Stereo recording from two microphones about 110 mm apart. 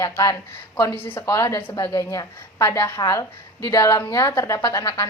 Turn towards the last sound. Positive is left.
turn(degrees=30)  # may be behind; listen again after turning